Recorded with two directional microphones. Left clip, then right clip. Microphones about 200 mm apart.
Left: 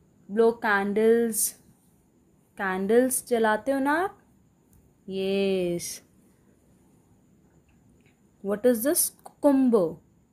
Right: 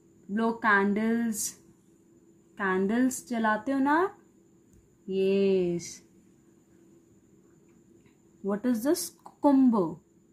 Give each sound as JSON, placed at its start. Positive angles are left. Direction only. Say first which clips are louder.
{"t": 0.3, "sound": "speech", "louder": "left 3 dB", "side_deg": 30}
{"t": 8.5, "sound": "speech", "louder": "left 5 dB", "side_deg": 35}